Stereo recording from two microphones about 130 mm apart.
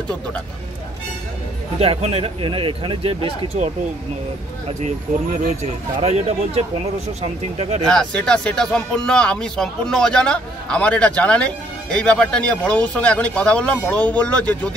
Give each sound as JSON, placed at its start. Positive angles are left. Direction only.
{"t": 1.8, "sound": "speech", "side_deg": -50}
{"t": 5.9, "sound": "speech", "side_deg": -50}
{"t": 7.9, "sound": "speech", "side_deg": 5}